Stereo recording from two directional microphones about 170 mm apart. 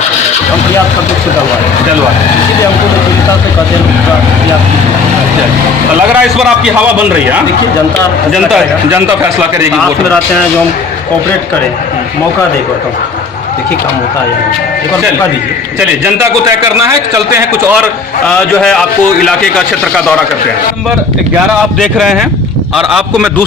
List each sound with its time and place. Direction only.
6.1 s a man's voice: 5° right (ahead or behind)
16.0 s a man's voice: 15° right (ahead or behind)
18.3 s a man's voice: 5° left (ahead or behind)
21.8 s a man's voice: centre (ahead or behind)